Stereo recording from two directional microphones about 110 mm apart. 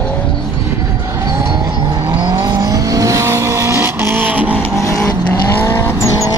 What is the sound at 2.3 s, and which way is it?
Vehicle, 35° right (ahead or behind).